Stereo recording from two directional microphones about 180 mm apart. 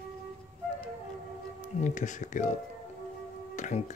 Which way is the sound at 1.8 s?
45° left (ahead or behind).